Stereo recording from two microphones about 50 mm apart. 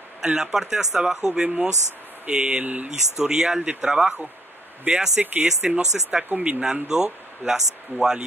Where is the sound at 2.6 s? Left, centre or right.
Right.